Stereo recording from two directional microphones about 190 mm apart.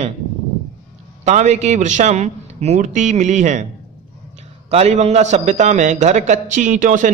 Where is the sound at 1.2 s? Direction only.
35° right (ahead or behind).